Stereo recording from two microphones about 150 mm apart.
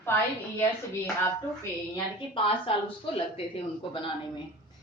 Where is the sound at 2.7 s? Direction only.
40° left (ahead or behind).